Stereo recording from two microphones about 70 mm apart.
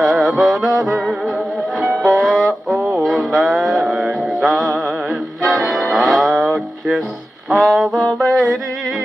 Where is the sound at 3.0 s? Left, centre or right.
Centre.